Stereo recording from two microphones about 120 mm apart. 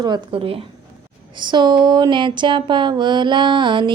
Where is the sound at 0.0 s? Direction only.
40° right (ahead or behind).